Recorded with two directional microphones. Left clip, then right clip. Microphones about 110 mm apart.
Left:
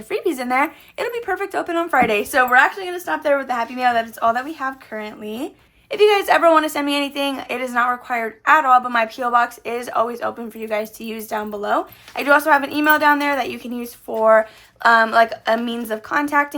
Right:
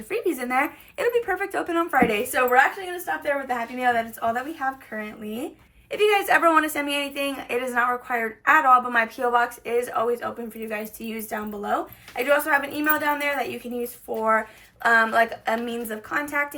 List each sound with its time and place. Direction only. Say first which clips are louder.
0.1 s a woman's voice: left 4 dB; 40° left (ahead or behind)
2.0 s a woman's voice: left 5 dB; 60° left (ahead or behind)
4.9 s speech: left 4 dB; 30° left (ahead or behind)
5.9 s a woman's voice: left 5 dB; 45° left (ahead or behind); by 9.1 s 30° left (ahead or behind)
9.3 s a woman's voice: left 4 dB; 40° left (ahead or behind)
16.2 s a woman's voice: left 9 dB; 60° left (ahead or behind)